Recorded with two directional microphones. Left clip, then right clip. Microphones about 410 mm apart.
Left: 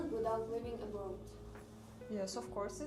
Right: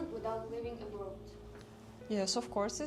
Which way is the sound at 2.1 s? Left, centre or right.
Right.